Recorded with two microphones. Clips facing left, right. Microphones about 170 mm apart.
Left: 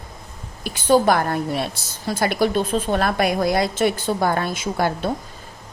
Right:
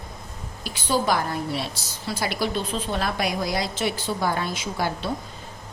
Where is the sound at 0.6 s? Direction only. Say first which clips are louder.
Left 8 dB; 50° left (ahead or behind).